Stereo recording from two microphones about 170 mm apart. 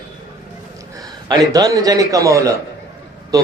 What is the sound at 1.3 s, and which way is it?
Speech, 25° right (ahead or behind).